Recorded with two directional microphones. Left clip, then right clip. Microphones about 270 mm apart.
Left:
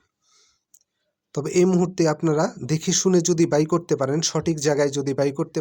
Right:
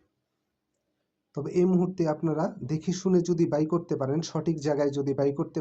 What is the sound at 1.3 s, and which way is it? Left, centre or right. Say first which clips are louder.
Speech: left 6 dB; left.